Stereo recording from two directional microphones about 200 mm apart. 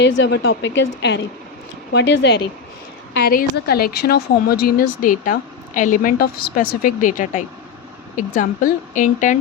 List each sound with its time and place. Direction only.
0.0 s a woman's voice: 60° left (ahead or behind)
3.2 s a woman's voice: 50° left (ahead or behind)